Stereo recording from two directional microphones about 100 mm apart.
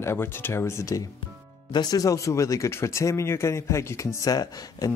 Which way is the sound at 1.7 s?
40° left (ahead or behind).